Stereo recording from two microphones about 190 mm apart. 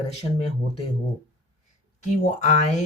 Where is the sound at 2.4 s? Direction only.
40° left (ahead or behind).